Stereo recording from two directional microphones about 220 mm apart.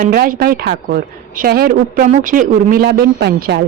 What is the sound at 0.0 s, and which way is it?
A woman's voice, 40° right (ahead or behind).